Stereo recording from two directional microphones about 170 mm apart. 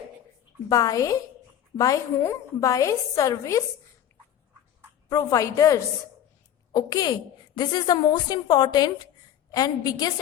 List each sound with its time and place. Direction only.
0.7 s a woman's voice: 20° left (ahead or behind)
5.0 s a woman's voice: 20° left (ahead or behind)